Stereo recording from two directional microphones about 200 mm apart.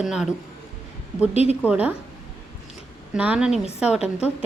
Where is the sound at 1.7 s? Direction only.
10° right (ahead or behind).